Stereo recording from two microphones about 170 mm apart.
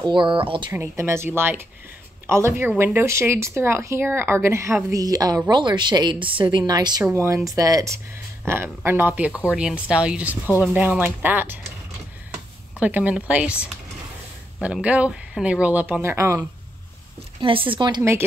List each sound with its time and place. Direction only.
0.0 s a woman's voice: 30° right (ahead or behind)
0.7 s a woman's voice: 15° right (ahead or behind)
10.4 s speech: 10° left (ahead or behind)
10.7 s speech: 10° right (ahead or behind)
12.7 s speech: 10° right (ahead or behind)
17.4 s a woman's voice: 30° right (ahead or behind)